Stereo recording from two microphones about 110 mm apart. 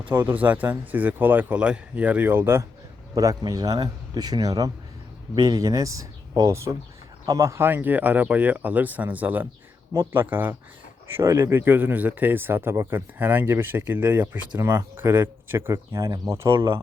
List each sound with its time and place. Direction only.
0.1 s speech: 20° right (ahead or behind)
3.2 s speech: 35° right (ahead or behind)